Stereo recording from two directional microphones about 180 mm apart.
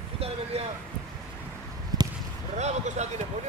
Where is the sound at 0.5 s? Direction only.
35° right (ahead or behind).